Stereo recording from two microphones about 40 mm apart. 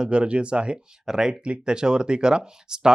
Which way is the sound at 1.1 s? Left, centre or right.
Centre.